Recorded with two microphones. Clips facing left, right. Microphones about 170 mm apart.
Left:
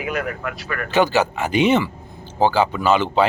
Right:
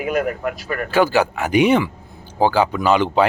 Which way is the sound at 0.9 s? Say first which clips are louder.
Right 1 dB; 10° right (ahead or behind).